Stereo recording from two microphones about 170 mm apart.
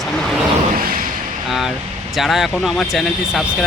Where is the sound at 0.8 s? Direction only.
60° right (ahead or behind).